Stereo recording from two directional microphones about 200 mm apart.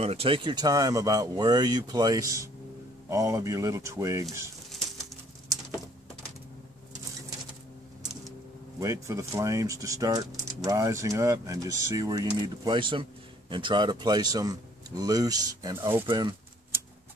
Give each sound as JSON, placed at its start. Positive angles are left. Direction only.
{"t": 0.0, "sound": "speech", "side_deg": -30}
{"t": 8.7, "sound": "speech", "side_deg": -15}